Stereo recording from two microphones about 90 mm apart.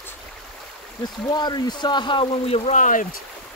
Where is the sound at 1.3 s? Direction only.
50° left (ahead or behind); by 2.6 s 80° left.